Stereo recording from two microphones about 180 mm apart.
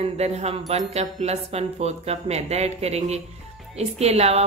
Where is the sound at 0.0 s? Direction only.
35° right (ahead or behind).